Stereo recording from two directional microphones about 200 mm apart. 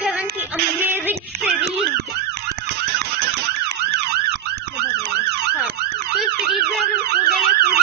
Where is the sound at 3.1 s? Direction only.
55° right (ahead or behind).